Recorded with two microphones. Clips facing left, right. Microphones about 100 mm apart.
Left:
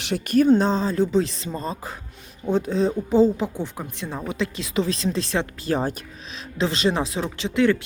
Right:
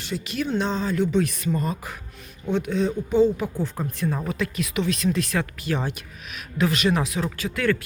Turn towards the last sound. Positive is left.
turn(degrees=20)  # may be behind; listen again after turning